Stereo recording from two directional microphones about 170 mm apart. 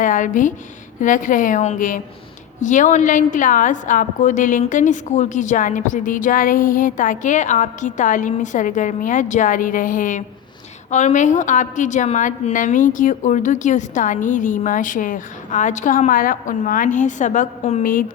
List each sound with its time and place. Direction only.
0.0 s a woman's voice: 50° left (ahead or behind)